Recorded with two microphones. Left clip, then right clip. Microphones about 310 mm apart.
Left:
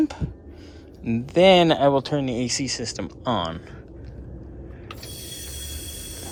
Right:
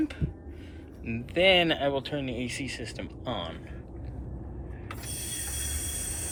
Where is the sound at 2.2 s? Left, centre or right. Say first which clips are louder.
Left 8 dB; left.